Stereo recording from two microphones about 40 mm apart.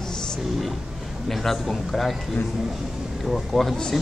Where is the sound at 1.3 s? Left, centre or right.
Centre.